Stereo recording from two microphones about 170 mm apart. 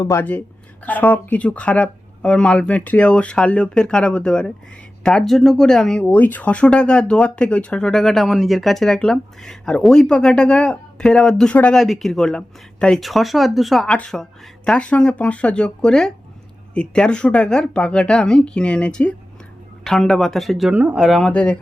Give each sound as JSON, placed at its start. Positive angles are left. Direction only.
{"t": 0.0, "sound": "speech", "side_deg": 15}